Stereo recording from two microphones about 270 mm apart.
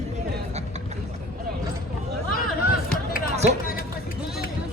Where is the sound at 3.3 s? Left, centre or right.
Right.